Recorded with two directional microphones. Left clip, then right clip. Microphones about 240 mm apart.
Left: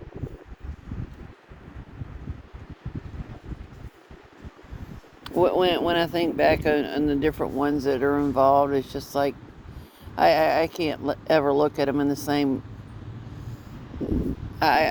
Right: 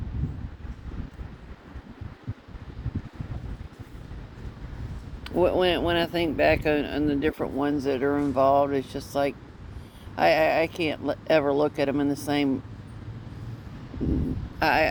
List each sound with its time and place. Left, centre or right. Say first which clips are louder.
5.2 s speech: left 1 dB; left
14.6 s mechanisms: left 2 dB; left